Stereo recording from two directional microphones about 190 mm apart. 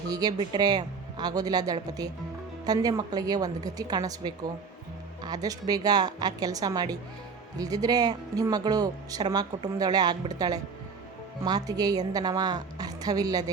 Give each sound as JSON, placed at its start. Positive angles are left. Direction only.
{"t": 0.1, "sound": "speech", "side_deg": -20}